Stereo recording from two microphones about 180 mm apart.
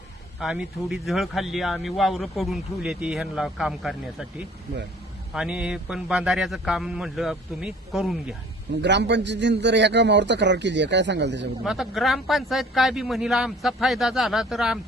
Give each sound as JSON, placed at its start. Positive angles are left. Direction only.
{"t": 0.3, "sound": "speech", "side_deg": 0}
{"t": 8.8, "sound": "a man's voice", "side_deg": -75}
{"t": 11.6, "sound": "speech", "side_deg": 0}